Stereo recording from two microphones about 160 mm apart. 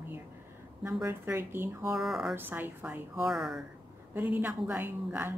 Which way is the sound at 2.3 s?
10° right (ahead or behind).